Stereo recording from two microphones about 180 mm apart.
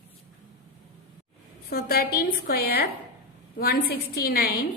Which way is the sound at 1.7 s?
55° left (ahead or behind).